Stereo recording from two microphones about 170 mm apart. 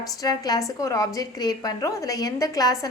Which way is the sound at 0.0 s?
20° left (ahead or behind).